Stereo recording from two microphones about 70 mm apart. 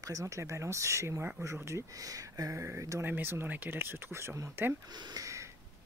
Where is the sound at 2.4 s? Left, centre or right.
Right.